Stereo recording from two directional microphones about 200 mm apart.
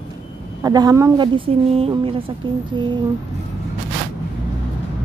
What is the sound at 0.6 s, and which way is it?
A woman's voice, 20° right (ahead or behind).